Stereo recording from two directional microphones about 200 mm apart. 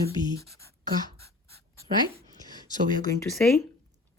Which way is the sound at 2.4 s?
20° left (ahead or behind).